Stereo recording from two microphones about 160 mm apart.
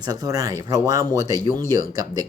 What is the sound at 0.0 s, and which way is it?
Speech, 25° right (ahead or behind).